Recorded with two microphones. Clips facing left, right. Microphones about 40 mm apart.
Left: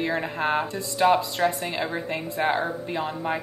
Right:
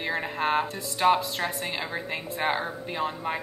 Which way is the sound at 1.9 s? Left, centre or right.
Centre.